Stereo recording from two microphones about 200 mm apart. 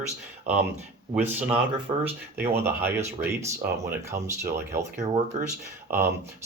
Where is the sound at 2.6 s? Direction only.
10° right (ahead or behind).